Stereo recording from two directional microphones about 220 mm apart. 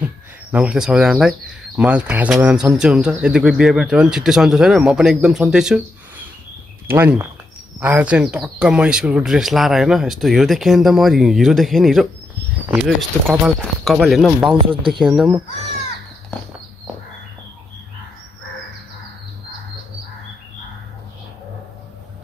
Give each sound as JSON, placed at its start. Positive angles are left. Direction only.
{"t": 0.0, "sound": "speech", "side_deg": -5}
{"t": 14.6, "sound": "speech", "side_deg": -25}
{"t": 14.9, "sound": "speech", "side_deg": 0}